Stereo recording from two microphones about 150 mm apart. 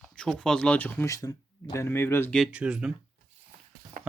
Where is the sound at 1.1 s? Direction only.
25° left (ahead or behind).